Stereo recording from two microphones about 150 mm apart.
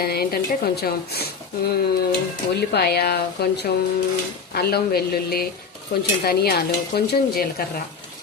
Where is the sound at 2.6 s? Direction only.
90° left.